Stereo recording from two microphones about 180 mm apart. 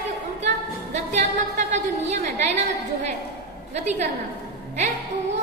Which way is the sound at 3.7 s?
40° right (ahead or behind).